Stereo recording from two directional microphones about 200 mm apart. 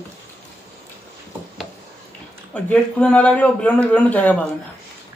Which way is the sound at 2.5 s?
5° left (ahead or behind).